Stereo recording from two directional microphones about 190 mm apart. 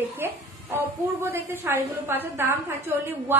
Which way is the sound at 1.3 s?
10° right (ahead or behind).